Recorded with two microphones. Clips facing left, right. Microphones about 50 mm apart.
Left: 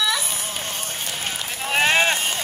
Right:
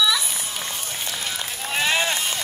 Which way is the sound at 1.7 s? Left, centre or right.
Left.